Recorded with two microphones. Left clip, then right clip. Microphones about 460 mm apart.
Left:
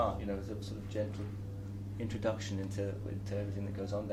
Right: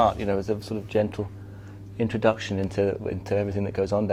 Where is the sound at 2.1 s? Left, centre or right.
Right.